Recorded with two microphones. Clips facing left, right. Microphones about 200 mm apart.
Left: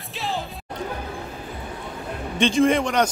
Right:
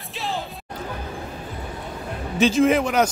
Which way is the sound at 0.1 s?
Centre (ahead or behind).